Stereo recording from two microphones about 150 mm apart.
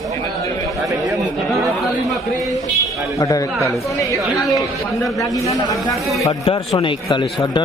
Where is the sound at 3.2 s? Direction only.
20° left (ahead or behind).